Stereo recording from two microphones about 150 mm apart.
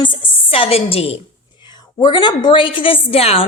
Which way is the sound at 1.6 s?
30° left (ahead or behind).